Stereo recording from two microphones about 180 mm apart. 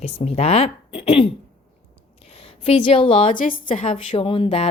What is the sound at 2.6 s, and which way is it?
Speech, 35° left (ahead or behind).